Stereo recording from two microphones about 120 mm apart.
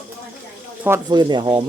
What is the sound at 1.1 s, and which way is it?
Speech, 40° right (ahead or behind).